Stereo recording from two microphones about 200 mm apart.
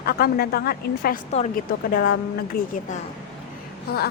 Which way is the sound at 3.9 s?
50° left (ahead or behind).